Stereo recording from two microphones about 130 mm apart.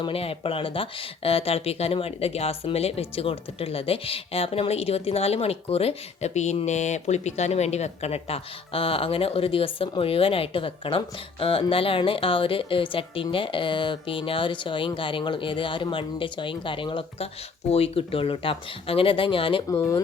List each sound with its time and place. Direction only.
0.0 s a woman's voice: 45° left (ahead or behind)
19.6 s speech: 25° left (ahead or behind)